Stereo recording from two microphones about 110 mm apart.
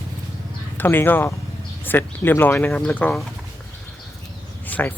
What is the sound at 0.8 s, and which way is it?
Speech, 20° left (ahead or behind).